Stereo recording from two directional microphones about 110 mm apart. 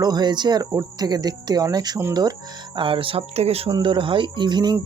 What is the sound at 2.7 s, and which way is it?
Speech, 50° right (ahead or behind).